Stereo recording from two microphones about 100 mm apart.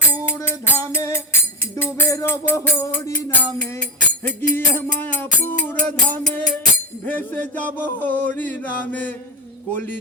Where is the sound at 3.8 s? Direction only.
10° left (ahead or behind).